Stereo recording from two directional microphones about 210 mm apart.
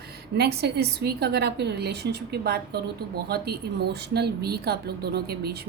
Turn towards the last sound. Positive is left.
turn(degrees=-50)  # may be behind; listen again after turning